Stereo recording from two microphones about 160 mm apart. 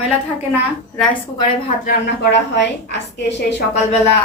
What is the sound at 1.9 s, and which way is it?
Speech, 90° left.